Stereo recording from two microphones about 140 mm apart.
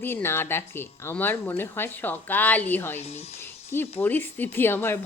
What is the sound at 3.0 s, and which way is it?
Speech, 50° left (ahead or behind).